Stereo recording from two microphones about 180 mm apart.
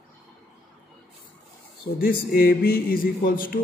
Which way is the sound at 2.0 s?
55° left (ahead or behind).